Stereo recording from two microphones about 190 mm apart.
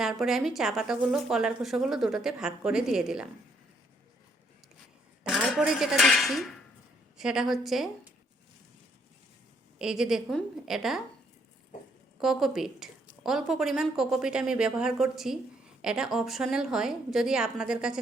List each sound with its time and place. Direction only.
0.0 s a woman's voice: centre (ahead or behind)
5.2 s a woman's voice: 5° right (ahead or behind)
9.7 s a woman's voice: 5° right (ahead or behind)
12.2 s a woman's voice: centre (ahead or behind)